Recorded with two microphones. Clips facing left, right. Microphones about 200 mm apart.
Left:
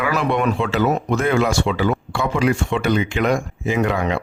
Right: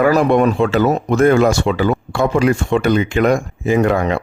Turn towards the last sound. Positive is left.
turn(degrees=-50)  # may be behind; listen again after turning